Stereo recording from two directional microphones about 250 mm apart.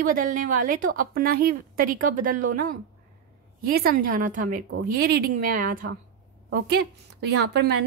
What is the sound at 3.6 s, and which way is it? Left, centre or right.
Speech, right.